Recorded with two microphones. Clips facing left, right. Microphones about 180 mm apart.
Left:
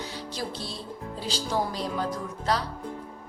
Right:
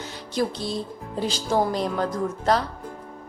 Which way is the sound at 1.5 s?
55° right (ahead or behind).